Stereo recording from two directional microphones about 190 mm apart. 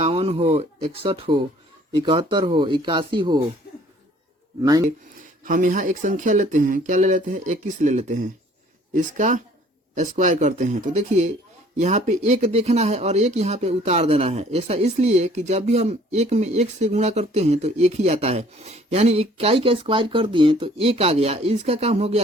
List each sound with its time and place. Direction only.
0.0 s speech: 30° right (ahead or behind)
5.5 s speech: 45° right (ahead or behind)